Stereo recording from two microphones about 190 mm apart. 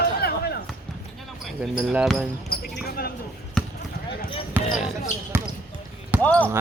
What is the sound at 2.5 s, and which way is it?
Basketball bounce, 55° left (ahead or behind).